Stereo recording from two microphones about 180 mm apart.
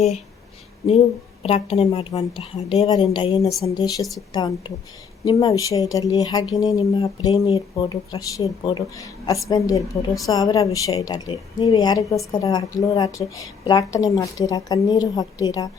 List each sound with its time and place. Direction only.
0.9 s speech: 35° left (ahead or behind)